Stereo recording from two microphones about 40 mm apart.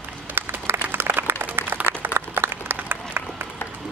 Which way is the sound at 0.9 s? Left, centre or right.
Right.